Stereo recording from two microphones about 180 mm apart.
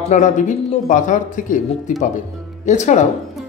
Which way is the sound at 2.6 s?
40° left (ahead or behind).